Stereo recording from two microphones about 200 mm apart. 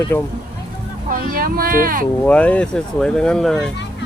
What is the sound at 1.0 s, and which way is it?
Speech, 45° right (ahead or behind).